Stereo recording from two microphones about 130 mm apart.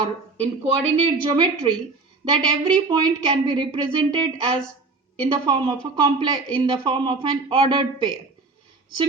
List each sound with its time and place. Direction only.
0.3 s speech: 50° right (ahead or behind)
1.2 s speech: 35° right (ahead or behind)